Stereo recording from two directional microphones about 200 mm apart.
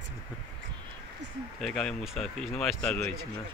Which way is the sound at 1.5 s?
5° left (ahead or behind).